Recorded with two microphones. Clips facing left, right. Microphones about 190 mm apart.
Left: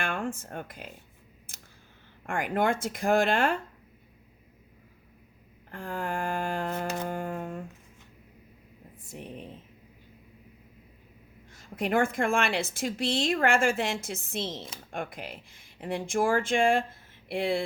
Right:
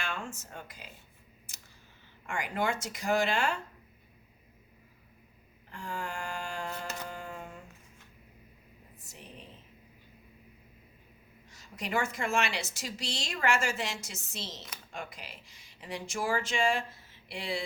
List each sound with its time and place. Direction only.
0.0 s speech: 55° left (ahead or behind)
1.5 s scissors: 55° left (ahead or behind)
2.2 s a woman's voice: 55° left (ahead or behind)
5.7 s a woman's voice: 55° left (ahead or behind)
6.9 s a sound: 55° left (ahead or behind)
9.0 s a sound: 55° left (ahead or behind)
11.5 s a woman's voice: 55° left (ahead or behind)